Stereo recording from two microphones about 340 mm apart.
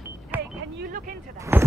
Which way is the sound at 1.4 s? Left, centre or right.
Centre.